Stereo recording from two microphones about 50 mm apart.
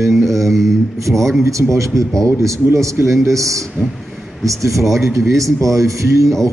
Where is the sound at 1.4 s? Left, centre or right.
Right.